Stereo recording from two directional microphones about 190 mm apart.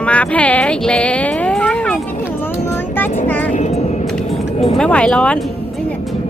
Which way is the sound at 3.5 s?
35° left (ahead or behind).